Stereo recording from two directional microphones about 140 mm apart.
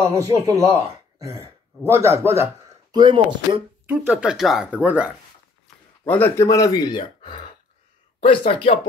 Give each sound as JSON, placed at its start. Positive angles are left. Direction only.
{"t": 0.1, "sound": "a man's voice", "side_deg": -25}
{"t": 2.9, "sound": "speech", "side_deg": -30}
{"t": 4.1, "sound": "speech", "side_deg": -5}
{"t": 6.0, "sound": "speech", "side_deg": 15}